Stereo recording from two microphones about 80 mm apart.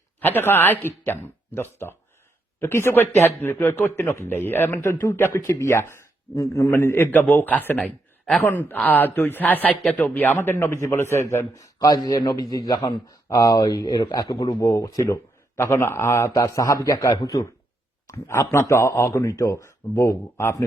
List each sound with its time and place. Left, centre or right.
0.2 s speech: left
5.4 s speech: left
6.7 s speech: left
10.3 s speech: left
12.4 s speech: left
15.1 s a man's voice: left
18.1 s speech: left